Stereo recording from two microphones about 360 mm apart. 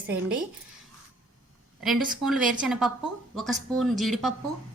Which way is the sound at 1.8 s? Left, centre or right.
Centre.